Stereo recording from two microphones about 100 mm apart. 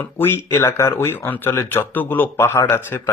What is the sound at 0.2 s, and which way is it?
Speech, 25° left (ahead or behind).